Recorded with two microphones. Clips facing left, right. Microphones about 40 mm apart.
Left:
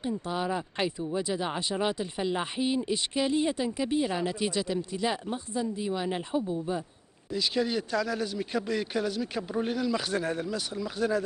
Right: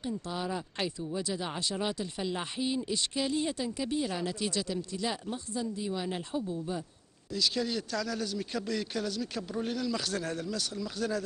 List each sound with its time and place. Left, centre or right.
0.0 s speech: centre